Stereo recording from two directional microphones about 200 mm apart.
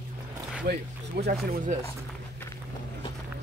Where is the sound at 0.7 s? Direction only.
50° right (ahead or behind).